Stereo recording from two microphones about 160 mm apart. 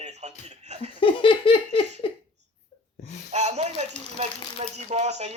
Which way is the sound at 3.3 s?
45° right (ahead or behind).